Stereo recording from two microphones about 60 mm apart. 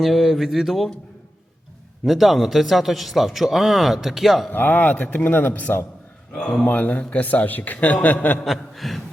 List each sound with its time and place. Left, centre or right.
0.0 s speech: centre
2.0 s speech: centre
4.5 s speech: left
6.3 s speech: centre
6.7 s speech: left
8.4 s speech: centre